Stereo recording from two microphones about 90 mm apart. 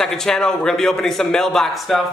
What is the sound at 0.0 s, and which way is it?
A man's voice, 5° left (ahead or behind).